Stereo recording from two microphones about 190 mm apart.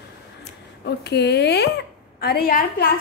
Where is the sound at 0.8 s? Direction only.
60° left (ahead or behind).